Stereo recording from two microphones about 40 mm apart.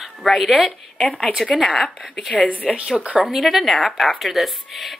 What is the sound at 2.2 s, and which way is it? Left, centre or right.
Speech, centre.